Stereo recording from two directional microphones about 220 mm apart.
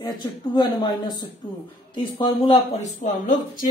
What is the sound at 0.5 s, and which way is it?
Speech, 20° left (ahead or behind).